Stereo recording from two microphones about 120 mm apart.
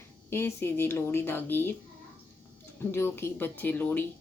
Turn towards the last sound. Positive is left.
turn(degrees=15)  # may be behind; listen again after turning